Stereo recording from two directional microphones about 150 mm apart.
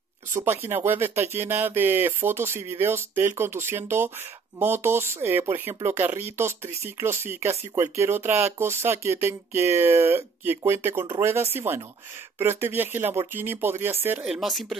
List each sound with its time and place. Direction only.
0.4 s speech: 15° right (ahead or behind); by 14.8 s centre (ahead or behind)